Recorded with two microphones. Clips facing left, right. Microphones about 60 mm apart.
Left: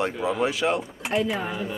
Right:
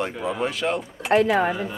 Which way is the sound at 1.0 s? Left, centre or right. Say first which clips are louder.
Right 8 dB; right.